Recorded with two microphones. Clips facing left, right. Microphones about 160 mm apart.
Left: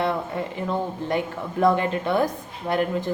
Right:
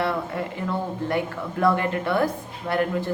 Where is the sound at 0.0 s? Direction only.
20° left (ahead or behind).